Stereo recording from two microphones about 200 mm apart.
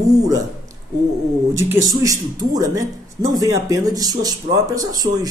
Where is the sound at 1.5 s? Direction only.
15° right (ahead or behind).